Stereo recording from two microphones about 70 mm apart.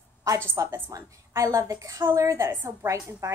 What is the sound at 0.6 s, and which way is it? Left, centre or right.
A woman's voice, right.